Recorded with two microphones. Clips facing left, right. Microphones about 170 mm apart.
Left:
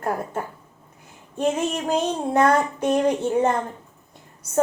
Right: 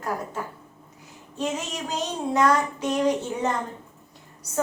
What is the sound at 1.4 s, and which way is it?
Child singing, 55° left (ahead or behind).